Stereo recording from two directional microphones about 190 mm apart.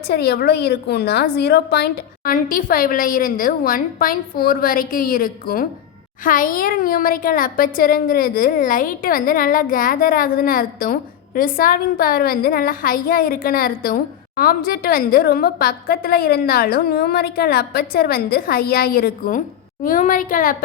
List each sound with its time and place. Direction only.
0.1 s a child's voice: 55° left (ahead or behind)